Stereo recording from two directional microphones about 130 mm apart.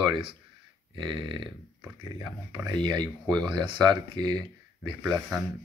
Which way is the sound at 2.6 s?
35° right (ahead or behind).